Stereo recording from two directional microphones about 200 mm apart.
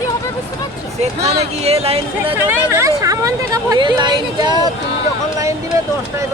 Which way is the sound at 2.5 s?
15° right (ahead or behind).